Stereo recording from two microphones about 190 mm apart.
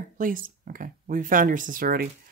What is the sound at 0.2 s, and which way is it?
Speech, 45° right (ahead or behind).